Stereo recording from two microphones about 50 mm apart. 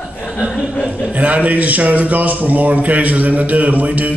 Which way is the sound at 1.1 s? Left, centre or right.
Right.